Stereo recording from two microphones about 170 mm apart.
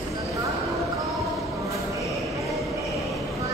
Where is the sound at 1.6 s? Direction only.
20° right (ahead or behind).